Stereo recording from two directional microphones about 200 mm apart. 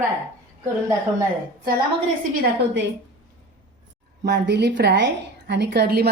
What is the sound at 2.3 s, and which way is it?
Speech, 55° right (ahead or behind).